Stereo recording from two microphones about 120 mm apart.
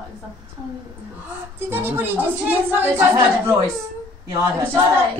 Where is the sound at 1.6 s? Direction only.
20° right (ahead or behind).